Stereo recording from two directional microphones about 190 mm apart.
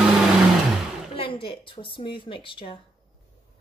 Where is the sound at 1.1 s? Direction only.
30° left (ahead or behind).